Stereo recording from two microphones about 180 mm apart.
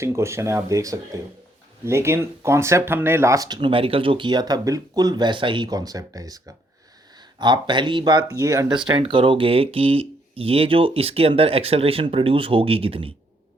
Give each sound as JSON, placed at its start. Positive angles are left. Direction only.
{"t": 0.0, "sound": "speech", "side_deg": -15}